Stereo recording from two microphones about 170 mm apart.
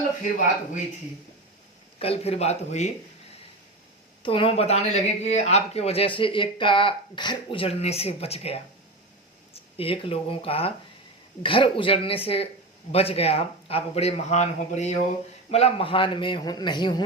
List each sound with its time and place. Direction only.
2.0 s speech: 35° left (ahead or behind)
4.2 s speech: 30° left (ahead or behind)
9.7 s a man's voice: 35° left (ahead or behind)